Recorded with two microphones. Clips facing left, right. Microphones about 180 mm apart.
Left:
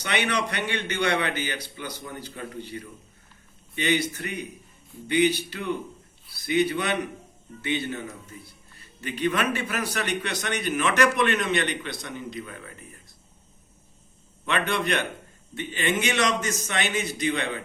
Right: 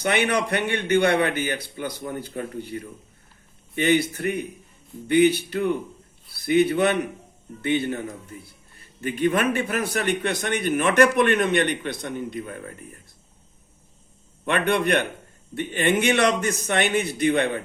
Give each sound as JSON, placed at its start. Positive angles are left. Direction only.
{"t": 0.0, "sound": "a man's voice", "side_deg": -50}
{"t": 9.0, "sound": "a man's voice", "side_deg": -50}
{"t": 12.4, "sound": "speech", "side_deg": -40}
{"t": 14.4, "sound": "a man's voice", "side_deg": -55}